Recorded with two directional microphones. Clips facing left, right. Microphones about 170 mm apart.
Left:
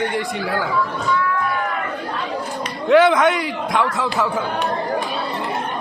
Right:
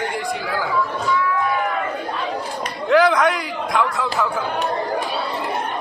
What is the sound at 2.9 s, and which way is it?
A man's voice, centre (ahead or behind).